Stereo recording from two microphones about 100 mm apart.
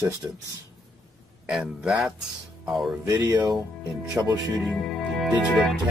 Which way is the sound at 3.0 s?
40° right (ahead or behind).